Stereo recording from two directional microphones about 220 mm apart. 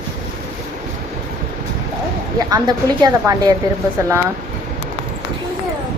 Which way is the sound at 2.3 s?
20° right (ahead or behind).